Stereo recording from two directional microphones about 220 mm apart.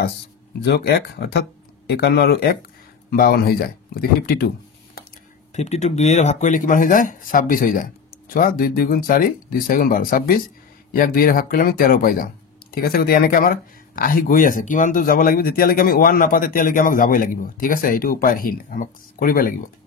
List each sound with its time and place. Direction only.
0.6 s speech: 50° left (ahead or behind)
5.5 s speech: 30° left (ahead or behind)